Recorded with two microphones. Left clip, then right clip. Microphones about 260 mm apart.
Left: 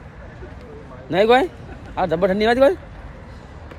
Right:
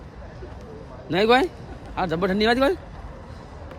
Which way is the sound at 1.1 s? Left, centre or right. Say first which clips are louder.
Left 3 dB; centre.